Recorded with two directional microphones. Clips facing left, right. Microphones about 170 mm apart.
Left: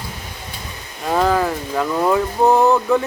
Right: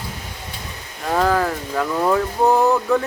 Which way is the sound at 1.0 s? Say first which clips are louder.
Left 1 dB; 15° left (ahead or behind).